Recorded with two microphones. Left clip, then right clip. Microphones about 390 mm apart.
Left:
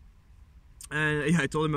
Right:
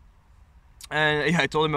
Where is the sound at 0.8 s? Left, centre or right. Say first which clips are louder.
Right 5 dB; centre.